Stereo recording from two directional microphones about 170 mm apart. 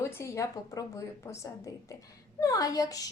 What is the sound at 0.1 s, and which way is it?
A woman's voice, 15° left (ahead or behind).